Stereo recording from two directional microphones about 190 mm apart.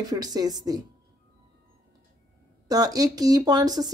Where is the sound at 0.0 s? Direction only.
20° right (ahead or behind).